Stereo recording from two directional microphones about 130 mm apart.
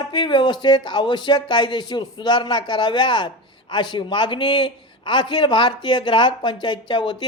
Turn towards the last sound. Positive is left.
turn(degrees=35)  # may be behind; listen again after turning